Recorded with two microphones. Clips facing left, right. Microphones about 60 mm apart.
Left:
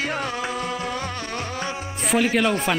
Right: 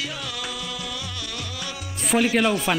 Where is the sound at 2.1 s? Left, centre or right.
Centre.